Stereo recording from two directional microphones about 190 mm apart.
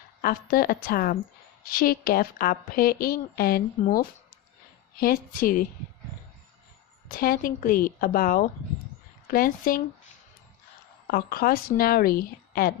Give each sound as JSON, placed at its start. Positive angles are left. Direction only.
{"t": 0.2, "sound": "a woman's voice", "side_deg": 50}
{"t": 7.2, "sound": "a woman's voice", "side_deg": 50}
{"t": 11.1, "sound": "a woman's voice", "side_deg": 50}